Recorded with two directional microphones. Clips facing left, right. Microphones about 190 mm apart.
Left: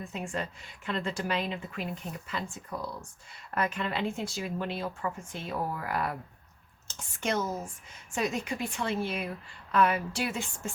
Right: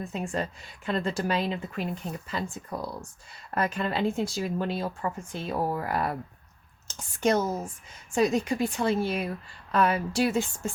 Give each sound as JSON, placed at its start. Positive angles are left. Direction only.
{"t": 0.0, "sound": "speech", "side_deg": -40}